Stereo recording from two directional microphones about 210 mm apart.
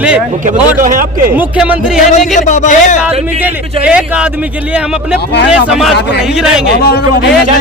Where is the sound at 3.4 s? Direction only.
5° right (ahead or behind).